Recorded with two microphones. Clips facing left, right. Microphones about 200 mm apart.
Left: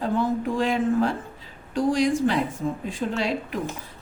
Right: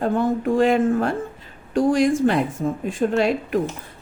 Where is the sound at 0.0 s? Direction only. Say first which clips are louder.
Right 3 dB; 55° right (ahead or behind).